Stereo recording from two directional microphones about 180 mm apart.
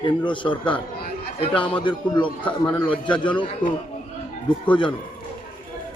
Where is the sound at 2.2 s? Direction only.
5° left (ahead or behind).